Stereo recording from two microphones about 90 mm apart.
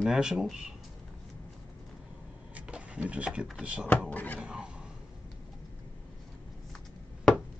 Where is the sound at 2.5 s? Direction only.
15° right (ahead or behind).